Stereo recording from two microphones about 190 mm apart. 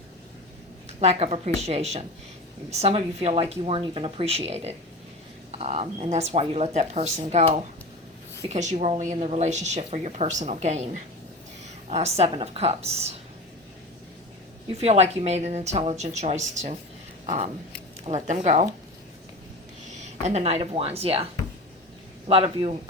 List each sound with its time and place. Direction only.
0.9 s a woman's voice: 35° right (ahead or behind)
11.9 s a woman's voice: 35° right (ahead or behind)
14.7 s a woman's voice: 35° right (ahead or behind)
19.9 s speech: 35° right (ahead or behind)
22.3 s speech: 30° right (ahead or behind)